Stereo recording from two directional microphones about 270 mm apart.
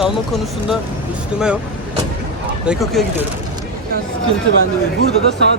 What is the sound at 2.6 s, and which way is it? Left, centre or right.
Speech, centre.